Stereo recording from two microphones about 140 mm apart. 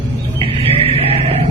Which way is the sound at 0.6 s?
45° right (ahead or behind).